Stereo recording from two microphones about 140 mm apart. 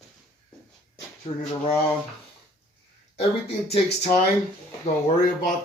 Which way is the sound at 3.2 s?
45° left (ahead or behind).